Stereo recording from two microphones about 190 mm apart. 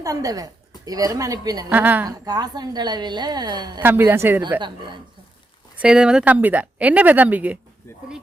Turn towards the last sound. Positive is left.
turn(degrees=-10)  # may be behind; listen again after turning